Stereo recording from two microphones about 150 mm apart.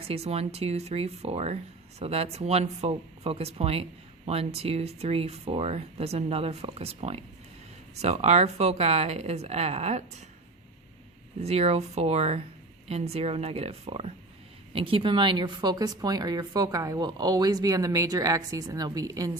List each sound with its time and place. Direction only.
0.0 s speech: 40° right (ahead or behind)
11.3 s a woman's voice: 45° right (ahead or behind); by 19.4 s 25° right (ahead or behind)